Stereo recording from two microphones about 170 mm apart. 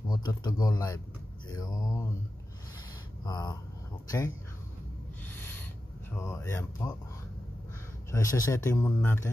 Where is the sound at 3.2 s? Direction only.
25° left (ahead or behind).